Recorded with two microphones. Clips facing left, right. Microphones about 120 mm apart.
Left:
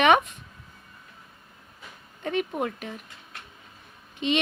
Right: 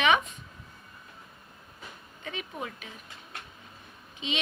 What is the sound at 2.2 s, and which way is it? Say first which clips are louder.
Speech: left 10 dB; 55° left (ahead or behind).